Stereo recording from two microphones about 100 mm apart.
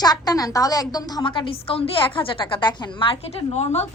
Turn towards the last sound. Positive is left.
turn(degrees=90)